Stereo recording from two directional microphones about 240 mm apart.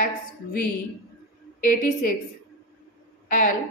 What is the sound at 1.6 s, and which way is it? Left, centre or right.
Speech, left.